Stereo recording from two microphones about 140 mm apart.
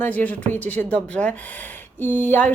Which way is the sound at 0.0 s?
10° left (ahead or behind).